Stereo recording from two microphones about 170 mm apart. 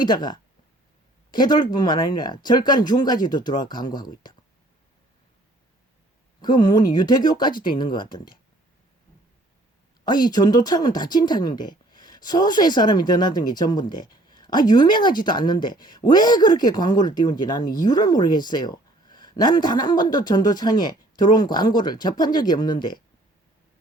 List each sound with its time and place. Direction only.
0.0 s speech: 25° left (ahead or behind)
6.4 s speech: 25° left (ahead or behind)
10.2 s speech: 25° left (ahead or behind)